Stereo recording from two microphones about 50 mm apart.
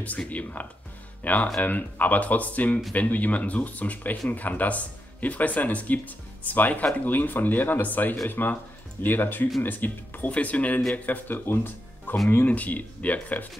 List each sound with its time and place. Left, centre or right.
0.3 s speech: left
12.4 s speech: left